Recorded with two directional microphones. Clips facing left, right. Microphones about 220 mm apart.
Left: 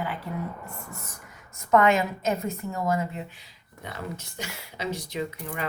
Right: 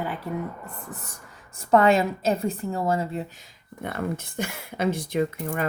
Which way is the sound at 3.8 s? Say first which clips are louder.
Right 7 dB; 55° right (ahead or behind).